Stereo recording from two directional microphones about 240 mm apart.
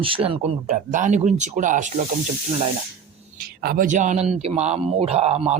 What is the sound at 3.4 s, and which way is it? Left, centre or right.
A man's voice, right.